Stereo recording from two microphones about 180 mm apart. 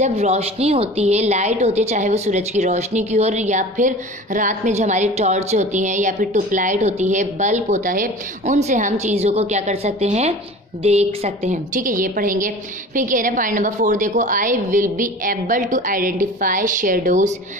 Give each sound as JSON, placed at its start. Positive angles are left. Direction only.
{"t": 0.0, "sound": "a woman's voice", "side_deg": -35}